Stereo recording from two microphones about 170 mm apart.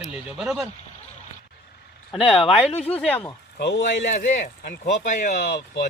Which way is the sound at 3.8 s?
50° left (ahead or behind).